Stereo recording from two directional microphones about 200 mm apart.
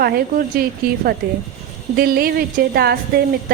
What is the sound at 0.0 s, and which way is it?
A woman's voice, 45° right (ahead or behind).